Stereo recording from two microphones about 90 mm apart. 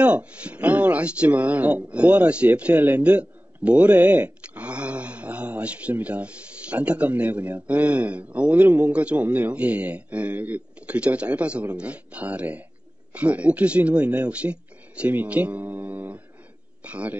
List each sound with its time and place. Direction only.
0.0 s speech: 15° right (ahead or behind)